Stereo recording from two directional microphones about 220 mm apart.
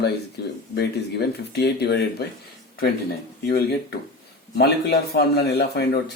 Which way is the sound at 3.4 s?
45° left (ahead or behind).